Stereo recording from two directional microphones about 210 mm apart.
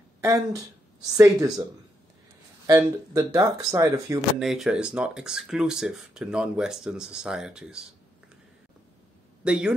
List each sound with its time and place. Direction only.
0.2 s speech: 15° right (ahead or behind)
2.6 s speech: 15° right (ahead or behind)
4.4 s speech: centre (ahead or behind)
9.4 s speech: 5° right (ahead or behind)